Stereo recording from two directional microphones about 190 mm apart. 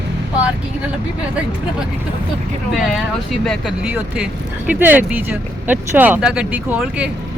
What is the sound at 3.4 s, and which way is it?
Speech, 5° right (ahead or behind).